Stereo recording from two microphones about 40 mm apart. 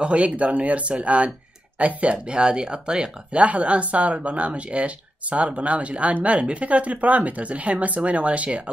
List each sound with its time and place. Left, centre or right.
0.0 s speech: right
3.4 s speech: right